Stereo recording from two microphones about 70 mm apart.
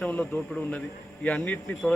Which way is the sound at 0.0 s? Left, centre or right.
Centre.